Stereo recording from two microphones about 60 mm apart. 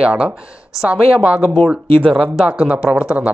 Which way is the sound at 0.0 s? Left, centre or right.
Centre.